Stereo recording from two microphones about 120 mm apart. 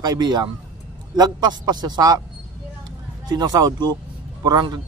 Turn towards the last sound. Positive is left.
turn(degrees=-35)  # may be behind; listen again after turning